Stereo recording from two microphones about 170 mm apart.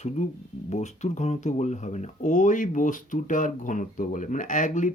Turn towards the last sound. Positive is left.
turn(degrees=45)  # may be behind; listen again after turning